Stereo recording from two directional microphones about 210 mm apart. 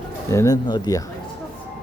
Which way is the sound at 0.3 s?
15° left (ahead or behind).